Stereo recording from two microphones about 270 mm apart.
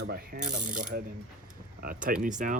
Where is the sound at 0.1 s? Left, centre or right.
Right.